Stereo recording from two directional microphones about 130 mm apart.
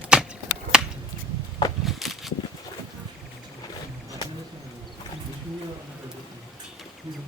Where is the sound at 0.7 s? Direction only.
5° right (ahead or behind).